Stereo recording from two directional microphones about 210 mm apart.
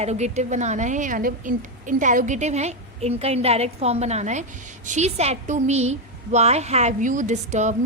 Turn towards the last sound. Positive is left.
turn(degrees=-35)  # may be behind; listen again after turning